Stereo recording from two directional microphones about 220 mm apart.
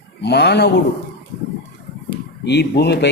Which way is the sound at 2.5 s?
50° left (ahead or behind).